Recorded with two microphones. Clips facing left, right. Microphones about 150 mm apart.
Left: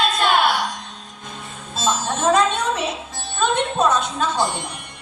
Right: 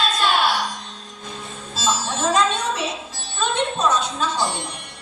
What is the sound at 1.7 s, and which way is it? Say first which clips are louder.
Music: left 2 dB; 55° left (ahead or behind).